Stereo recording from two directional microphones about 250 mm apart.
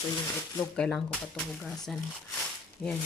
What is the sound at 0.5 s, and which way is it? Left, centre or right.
Speech, centre.